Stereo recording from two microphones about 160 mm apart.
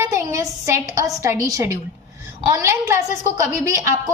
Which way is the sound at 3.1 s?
45° left (ahead or behind).